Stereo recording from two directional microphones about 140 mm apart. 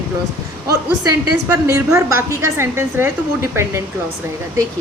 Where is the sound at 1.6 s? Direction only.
25° right (ahead or behind).